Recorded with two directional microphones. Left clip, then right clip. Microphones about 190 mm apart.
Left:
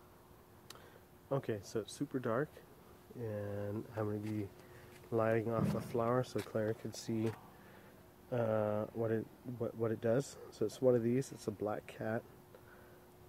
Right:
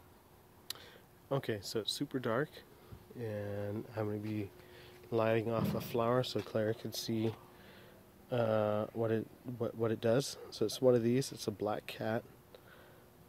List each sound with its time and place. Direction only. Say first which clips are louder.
1.3 s speech: right 2 dB; 15° right (ahead or behind)
8.3 s speech: right 3 dB; 15° right (ahead or behind)